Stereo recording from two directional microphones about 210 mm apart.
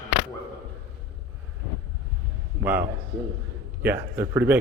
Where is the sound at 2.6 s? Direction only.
10° right (ahead or behind).